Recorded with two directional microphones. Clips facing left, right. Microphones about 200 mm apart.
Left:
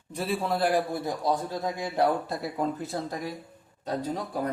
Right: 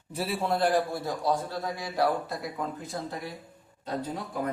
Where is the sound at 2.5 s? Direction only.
35° left (ahead or behind).